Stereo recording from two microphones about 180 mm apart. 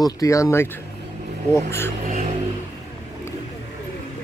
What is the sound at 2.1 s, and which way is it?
Vehicle, 40° right (ahead or behind).